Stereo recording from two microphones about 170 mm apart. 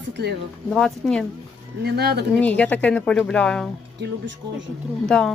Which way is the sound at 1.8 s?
70° right (ahead or behind).